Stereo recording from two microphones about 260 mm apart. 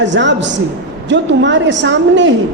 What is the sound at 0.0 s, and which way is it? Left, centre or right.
A man's voice, right.